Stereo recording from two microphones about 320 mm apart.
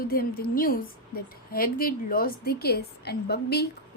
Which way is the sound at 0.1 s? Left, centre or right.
Left.